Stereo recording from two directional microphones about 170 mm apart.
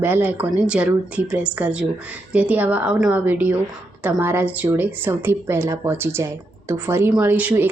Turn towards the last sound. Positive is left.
turn(degrees=-10)  # may be behind; listen again after turning